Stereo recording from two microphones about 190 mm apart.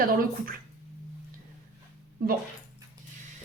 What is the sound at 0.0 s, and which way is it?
Speech, 50° right (ahead or behind).